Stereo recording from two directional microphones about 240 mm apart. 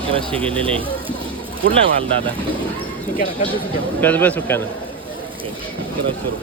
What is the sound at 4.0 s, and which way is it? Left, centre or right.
Speech, centre.